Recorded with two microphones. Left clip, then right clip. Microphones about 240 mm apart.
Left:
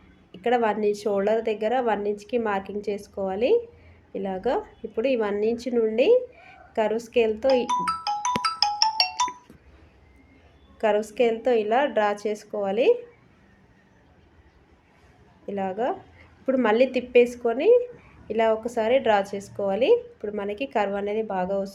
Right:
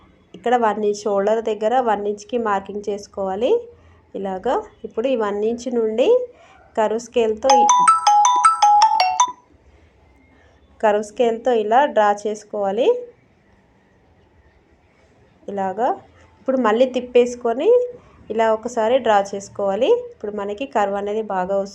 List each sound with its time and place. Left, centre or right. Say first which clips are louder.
0.3 s a woman's voice: right 5 dB; centre
7.7 s music: right 12 dB; right
8.8 s ringtone: right 8 dB; right
10.8 s a woman's voice: right 5 dB; centre
15.4 s a woman's voice: right 6 dB; centre